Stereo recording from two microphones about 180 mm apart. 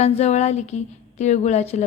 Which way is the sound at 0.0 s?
35° left (ahead or behind).